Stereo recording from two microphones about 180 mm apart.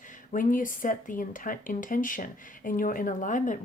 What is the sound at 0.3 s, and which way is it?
Speech, 50° left (ahead or behind).